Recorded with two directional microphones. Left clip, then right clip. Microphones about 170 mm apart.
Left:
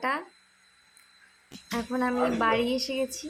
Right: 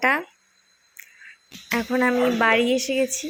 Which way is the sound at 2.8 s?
15° right (ahead or behind).